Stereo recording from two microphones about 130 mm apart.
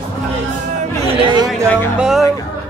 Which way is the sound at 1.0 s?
45° right (ahead or behind).